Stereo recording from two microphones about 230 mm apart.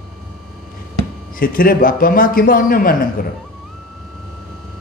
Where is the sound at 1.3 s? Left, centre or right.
Left.